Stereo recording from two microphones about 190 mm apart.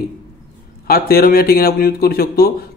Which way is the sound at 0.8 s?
50° left (ahead or behind).